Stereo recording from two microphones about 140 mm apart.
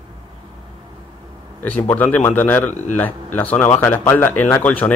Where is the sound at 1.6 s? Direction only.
10° left (ahead or behind).